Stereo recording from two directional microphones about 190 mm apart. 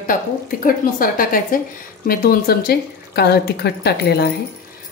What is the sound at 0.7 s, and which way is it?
A woman's voice, 50° left (ahead or behind).